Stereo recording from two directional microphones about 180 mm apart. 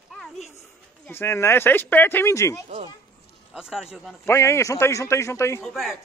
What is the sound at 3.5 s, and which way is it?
Speech, 5° right (ahead or behind).